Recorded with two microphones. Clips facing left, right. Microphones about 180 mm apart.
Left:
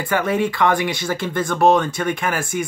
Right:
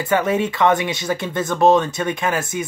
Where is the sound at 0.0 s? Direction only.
20° right (ahead or behind).